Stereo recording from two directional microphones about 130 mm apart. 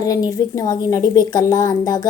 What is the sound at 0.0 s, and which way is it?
A woman's voice, 30° left (ahead or behind).